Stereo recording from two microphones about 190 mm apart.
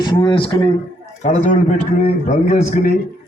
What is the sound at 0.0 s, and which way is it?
A man's voice, 25° left (ahead or behind).